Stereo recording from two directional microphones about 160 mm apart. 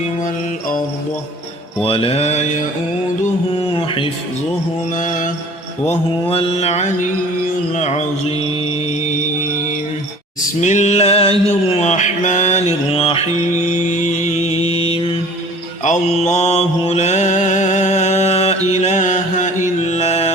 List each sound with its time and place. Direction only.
1.8 s music: 35° left (ahead or behind)
3.8 s music: 35° left (ahead or behind)
4.9 s mantra: 55° left (ahead or behind)
6.2 s music: 35° left (ahead or behind)
7.8 s mantra: 45° left (ahead or behind)
10.6 s mantra: 45° left (ahead or behind)
15.8 s mantra: 45° left (ahead or behind)